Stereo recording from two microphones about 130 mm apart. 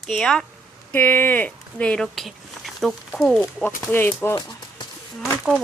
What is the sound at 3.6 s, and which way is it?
Speech, 15° left (ahead or behind).